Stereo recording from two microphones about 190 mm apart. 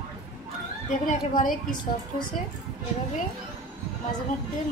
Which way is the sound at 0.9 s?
40° left (ahead or behind).